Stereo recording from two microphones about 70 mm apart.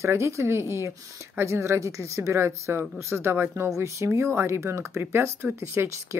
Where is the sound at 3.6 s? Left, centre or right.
Right.